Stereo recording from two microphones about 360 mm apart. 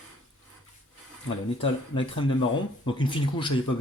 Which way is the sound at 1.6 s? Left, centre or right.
Centre.